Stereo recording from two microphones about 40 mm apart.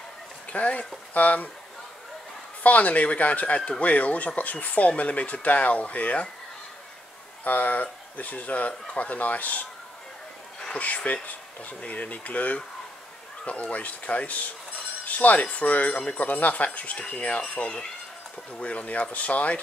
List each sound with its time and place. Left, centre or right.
0.5 s speech: left
2.6 s speech: left
7.4 s speech: left
10.7 s speech: left
18.5 s speech: left